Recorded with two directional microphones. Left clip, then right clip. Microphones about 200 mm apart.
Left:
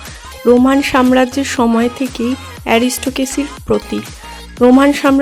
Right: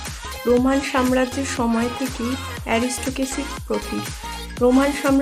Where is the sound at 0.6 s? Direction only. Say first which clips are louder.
Left 8 dB; 45° left (ahead or behind).